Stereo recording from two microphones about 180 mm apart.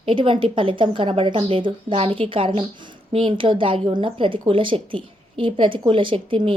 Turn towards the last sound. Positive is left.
turn(degrees=-30)  # may be behind; listen again after turning